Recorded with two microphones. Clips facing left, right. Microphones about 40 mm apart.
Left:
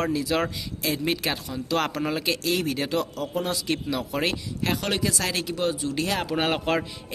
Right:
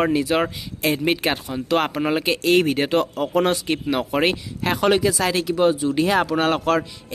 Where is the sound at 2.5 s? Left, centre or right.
Right.